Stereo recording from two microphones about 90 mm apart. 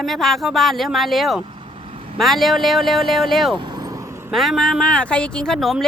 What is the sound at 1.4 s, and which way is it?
Vehicle, 75° right (ahead or behind).